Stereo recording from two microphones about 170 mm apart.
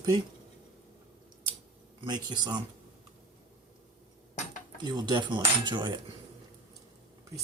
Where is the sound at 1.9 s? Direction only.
25° right (ahead or behind).